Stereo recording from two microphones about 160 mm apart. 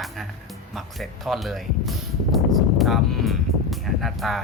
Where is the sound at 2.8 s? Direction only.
Centre (ahead or behind).